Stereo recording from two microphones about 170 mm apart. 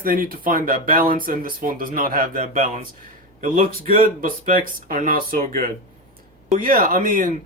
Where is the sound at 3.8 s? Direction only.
55° right (ahead or behind).